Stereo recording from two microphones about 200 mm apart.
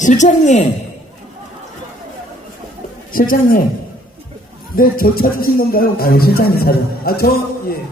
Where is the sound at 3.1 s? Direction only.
45° left (ahead or behind).